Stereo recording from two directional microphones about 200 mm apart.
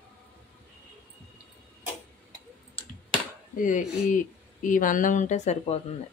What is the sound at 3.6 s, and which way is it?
Speech, 40° left (ahead or behind).